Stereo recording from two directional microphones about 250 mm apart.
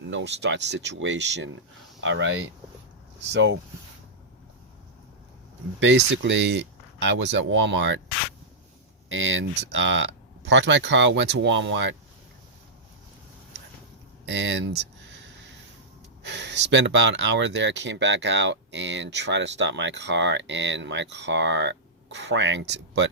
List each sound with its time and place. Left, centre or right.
0.0 s speech: right
5.8 s speech: right
9.0 s speech: right
14.3 s speech: right
16.2 s speech: right